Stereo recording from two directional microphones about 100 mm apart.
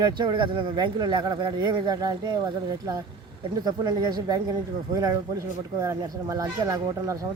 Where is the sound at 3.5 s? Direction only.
40° right (ahead or behind).